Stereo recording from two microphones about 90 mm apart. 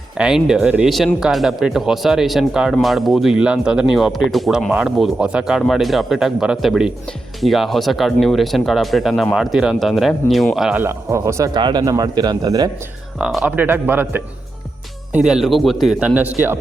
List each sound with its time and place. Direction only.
0.2 s speech: 10° right (ahead or behind)
10.8 s speech: 30° right (ahead or behind)
11.5 s a man's voice: 55° right (ahead or behind)
13.1 s speech: 10° right (ahead or behind)
15.1 s speech: 10° right (ahead or behind)
16.0 s speech: 15° right (ahead or behind)